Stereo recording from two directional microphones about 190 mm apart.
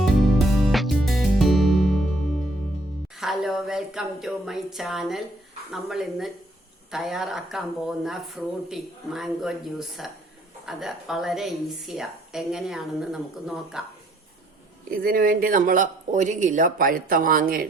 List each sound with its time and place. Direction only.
0.0 s music: centre (ahead or behind)
3.2 s a woman's voice: centre (ahead or behind)
14.8 s speech: 50° right (ahead or behind)